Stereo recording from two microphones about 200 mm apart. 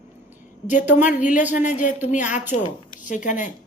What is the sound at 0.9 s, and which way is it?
Speech, 40° left (ahead or behind).